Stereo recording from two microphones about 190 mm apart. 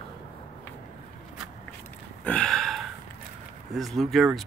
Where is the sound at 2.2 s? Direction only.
5° left (ahead or behind).